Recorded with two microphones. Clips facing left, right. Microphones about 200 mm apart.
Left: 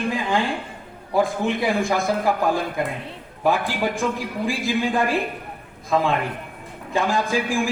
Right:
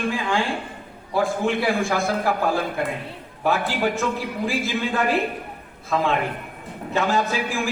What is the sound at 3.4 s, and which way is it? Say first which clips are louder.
Speech: left 1 dB; 15° left (ahead or behind).